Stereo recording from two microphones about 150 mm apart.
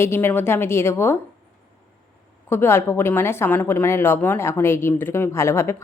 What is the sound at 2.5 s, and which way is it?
Speech, 15° left (ahead or behind).